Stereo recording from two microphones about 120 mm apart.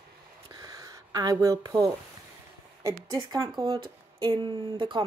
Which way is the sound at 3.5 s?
45° right (ahead or behind).